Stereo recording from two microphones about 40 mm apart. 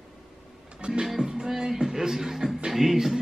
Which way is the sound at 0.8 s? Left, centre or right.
Right.